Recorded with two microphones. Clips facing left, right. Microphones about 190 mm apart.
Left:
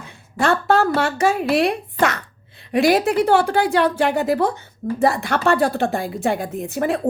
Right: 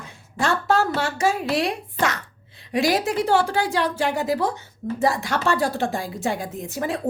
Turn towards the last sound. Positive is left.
turn(degrees=60)  # may be behind; listen again after turning